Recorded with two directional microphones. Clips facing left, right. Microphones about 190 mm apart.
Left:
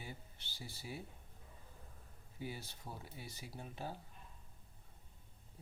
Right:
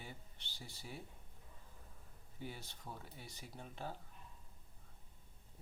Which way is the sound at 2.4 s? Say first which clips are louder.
Left 3 dB; 5° left (ahead or behind).